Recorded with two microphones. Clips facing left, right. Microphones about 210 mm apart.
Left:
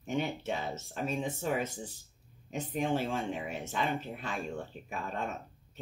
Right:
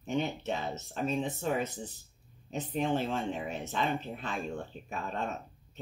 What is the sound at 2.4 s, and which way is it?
Speech, 10° left (ahead or behind).